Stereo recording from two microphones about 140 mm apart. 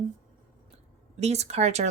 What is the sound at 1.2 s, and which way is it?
Speech, 50° right (ahead or behind).